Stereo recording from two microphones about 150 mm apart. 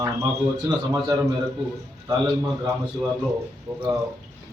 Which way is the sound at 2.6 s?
20° right (ahead or behind).